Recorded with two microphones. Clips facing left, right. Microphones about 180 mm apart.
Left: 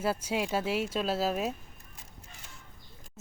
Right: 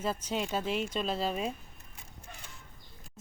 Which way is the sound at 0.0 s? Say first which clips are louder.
Left 3 dB; 10° left (ahead or behind).